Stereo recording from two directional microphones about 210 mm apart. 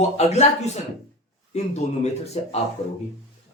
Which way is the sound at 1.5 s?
30° left (ahead or behind).